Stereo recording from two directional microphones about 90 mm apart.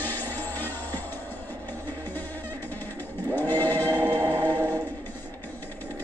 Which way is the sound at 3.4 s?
20° left (ahead or behind).